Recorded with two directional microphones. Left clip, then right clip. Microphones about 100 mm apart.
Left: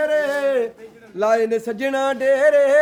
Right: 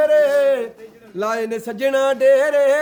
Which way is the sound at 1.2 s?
25° right (ahead or behind).